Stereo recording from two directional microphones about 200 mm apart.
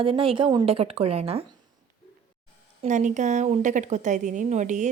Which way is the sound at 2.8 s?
35° right (ahead or behind).